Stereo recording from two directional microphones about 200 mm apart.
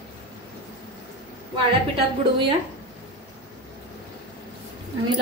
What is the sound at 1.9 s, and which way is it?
Speech, 25° right (ahead or behind).